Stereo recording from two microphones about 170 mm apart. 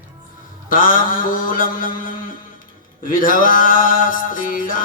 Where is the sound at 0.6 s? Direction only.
55° left (ahead or behind).